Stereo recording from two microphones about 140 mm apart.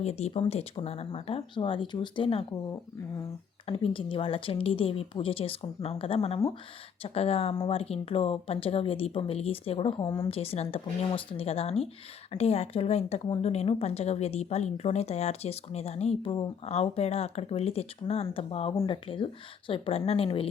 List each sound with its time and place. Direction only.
0.0 s a woman's voice: 50° left (ahead or behind)
3.7 s a woman's voice: 40° left (ahead or behind)
10.0 s a woman's voice: 30° left (ahead or behind)
10.2 s a woman's voice: 45° left (ahead or behind)